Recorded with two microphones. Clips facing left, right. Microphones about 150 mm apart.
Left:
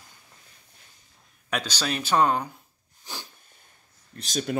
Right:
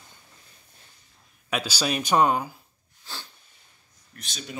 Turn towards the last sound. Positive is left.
turn(degrees=50)  # may be behind; listen again after turning